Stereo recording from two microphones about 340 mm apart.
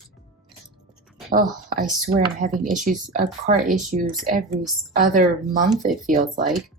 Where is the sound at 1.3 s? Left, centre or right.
Right.